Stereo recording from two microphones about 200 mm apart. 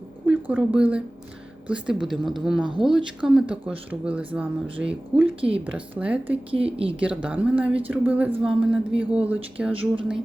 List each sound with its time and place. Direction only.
0.3 s a woman's voice: 5° right (ahead or behind)
5.4 s a woman's voice: 30° right (ahead or behind)
5.6 s a woman's voice: 5° right (ahead or behind)
6.7 s a woman's voice: 25° right (ahead or behind)
7.0 s a woman's voice: 5° right (ahead or behind)